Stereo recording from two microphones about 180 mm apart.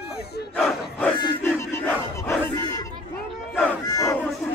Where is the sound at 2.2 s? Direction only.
15° left (ahead or behind).